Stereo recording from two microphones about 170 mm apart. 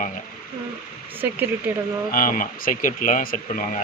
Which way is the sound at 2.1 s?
55° left (ahead or behind).